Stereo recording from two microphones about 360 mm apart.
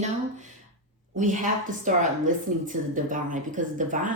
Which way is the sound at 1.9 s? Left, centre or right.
Right.